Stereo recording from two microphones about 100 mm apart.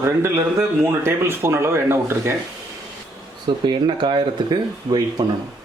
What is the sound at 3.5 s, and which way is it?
Speech, 50° right (ahead or behind).